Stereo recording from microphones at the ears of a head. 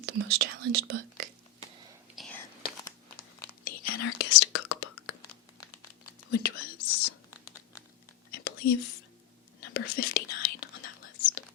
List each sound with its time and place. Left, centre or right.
0.0 s whispering: right
3.2 s whispering: left